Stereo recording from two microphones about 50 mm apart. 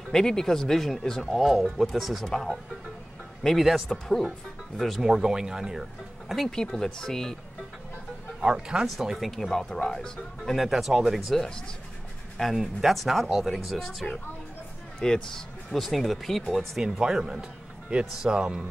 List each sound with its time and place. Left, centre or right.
0.1 s speech: centre
3.4 s speech: centre
5.0 s a man's voice: centre
6.5 s speech: centre
8.4 s a man's voice: centre
8.8 s speech: centre
9.3 s speech: centre
11.3 s speech: centre
12.5 s speech: centre
16.8 s a man's voice: centre